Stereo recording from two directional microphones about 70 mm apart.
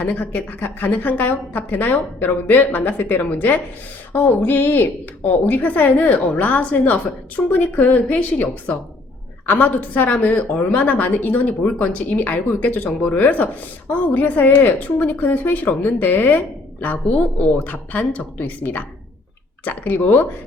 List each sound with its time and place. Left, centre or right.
0.0 s a woman's voice: left
17.5 s a woman's voice: left